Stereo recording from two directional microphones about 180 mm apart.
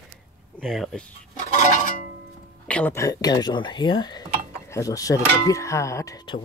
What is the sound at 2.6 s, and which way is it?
Speech, 10° left (ahead or behind).